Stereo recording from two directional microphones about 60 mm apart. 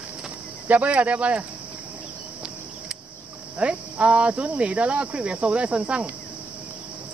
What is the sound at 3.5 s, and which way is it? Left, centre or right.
Speech, right.